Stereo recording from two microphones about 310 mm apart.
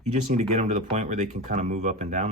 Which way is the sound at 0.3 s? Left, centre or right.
Right.